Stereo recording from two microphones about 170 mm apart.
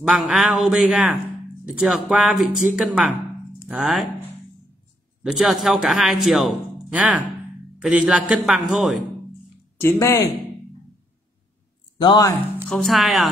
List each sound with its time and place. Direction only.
0.1 s speech: centre (ahead or behind)
5.2 s speech: centre (ahead or behind)
9.8 s speech: 15° left (ahead or behind)
12.0 s speech: 25° left (ahead or behind)
12.6 s speech: centre (ahead or behind)